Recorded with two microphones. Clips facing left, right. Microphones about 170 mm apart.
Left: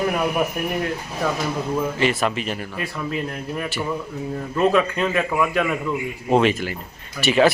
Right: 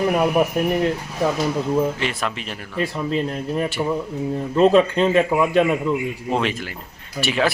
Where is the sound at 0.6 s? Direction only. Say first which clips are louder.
Right 6 dB; 25° right (ahead or behind).